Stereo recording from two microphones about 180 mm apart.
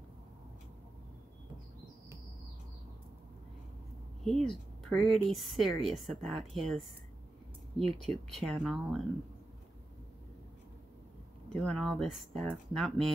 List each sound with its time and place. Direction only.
4.2 s a woman's voice: centre (ahead or behind)
8.0 s a woman's voice: centre (ahead or behind)
11.5 s a woman's voice: 5° left (ahead or behind)